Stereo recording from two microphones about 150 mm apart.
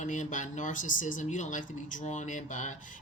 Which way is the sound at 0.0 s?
55° left (ahead or behind).